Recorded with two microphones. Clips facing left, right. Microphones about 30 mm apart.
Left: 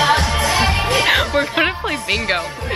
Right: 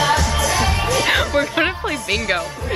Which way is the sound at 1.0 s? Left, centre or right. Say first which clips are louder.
Even; left.